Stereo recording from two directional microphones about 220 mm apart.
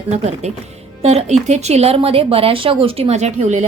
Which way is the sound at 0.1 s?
30° right (ahead or behind).